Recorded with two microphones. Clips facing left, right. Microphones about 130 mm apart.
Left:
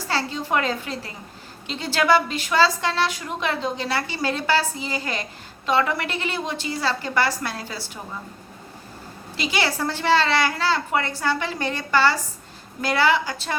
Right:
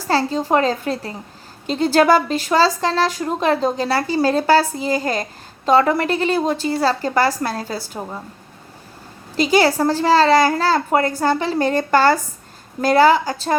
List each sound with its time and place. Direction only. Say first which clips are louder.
0.1 s speech: right 7 dB; 40° right (ahead or behind)
9.4 s a woman's voice: right 9 dB; 45° right (ahead or behind)